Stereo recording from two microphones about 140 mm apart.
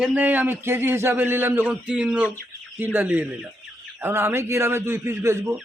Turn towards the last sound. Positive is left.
turn(degrees=-20)  # may be behind; listen again after turning